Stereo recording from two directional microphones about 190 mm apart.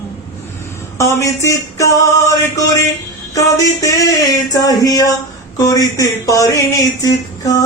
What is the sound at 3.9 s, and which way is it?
Speech, 15° left (ahead or behind).